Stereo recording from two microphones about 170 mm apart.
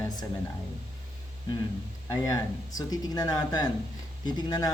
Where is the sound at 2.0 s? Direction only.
20° left (ahead or behind).